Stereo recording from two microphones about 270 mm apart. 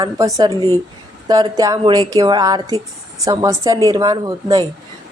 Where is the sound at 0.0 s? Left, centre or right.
Centre.